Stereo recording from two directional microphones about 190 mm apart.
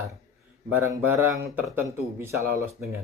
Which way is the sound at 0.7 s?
10° right (ahead or behind).